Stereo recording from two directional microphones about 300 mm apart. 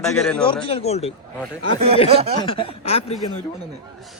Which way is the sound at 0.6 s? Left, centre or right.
Centre.